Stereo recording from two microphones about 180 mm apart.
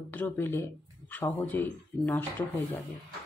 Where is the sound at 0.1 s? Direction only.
10° left (ahead or behind).